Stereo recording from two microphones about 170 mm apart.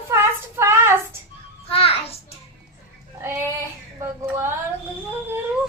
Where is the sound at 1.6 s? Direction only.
35° left (ahead or behind).